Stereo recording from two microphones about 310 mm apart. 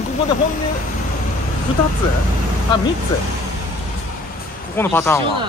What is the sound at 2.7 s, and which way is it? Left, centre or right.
Speech, centre.